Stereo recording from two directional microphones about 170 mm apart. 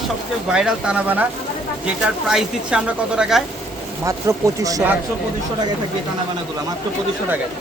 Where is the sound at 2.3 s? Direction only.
5° right (ahead or behind).